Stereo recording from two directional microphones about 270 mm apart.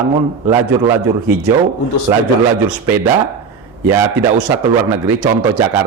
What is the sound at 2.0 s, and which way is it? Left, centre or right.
A man's voice, centre.